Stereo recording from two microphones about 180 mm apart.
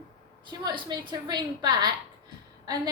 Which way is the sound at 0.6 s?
25° right (ahead or behind).